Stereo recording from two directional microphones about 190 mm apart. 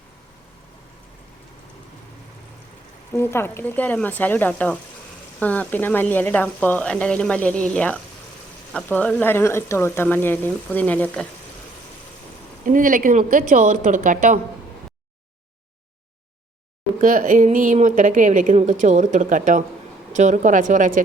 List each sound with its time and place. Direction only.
3.1 s speech: 15° left (ahead or behind)
12.6 s speech: 45° right (ahead or behind)
17.0 s a woman's voice: 40° right (ahead or behind)